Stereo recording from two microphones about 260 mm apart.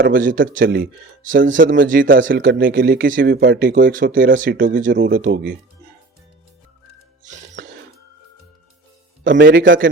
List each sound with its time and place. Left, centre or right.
0.0 s speech: right
7.3 s music: right
9.2 s speech: right